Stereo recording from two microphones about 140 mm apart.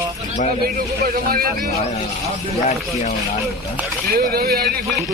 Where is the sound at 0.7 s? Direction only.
90° right.